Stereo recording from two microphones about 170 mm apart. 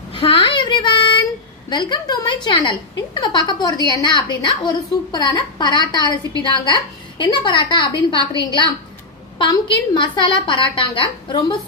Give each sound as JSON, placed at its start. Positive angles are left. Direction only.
{"t": 0.1, "sound": "child singing", "side_deg": 30}
{"t": 1.7, "sound": "a woman's voice", "side_deg": 25}
{"t": 9.4, "sound": "a woman's voice", "side_deg": 30}